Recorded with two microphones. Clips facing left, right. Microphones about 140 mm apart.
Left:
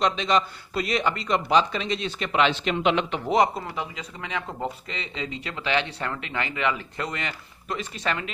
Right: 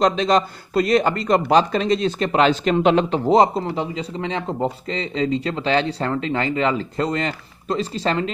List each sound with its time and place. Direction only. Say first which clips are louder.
0.0 s speech: right 6 dB; 40° right (ahead or behind)